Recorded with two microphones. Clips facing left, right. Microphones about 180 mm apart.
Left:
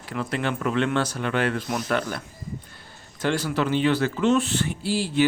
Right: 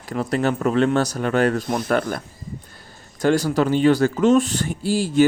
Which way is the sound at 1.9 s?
45° right (ahead or behind).